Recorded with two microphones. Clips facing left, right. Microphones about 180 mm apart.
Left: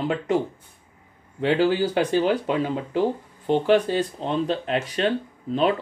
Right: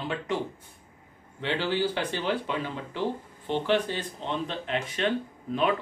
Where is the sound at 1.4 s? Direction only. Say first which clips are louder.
Left 7 dB; 45° left (ahead or behind).